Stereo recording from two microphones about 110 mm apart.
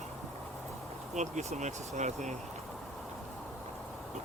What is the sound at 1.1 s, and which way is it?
Speech, 90° right.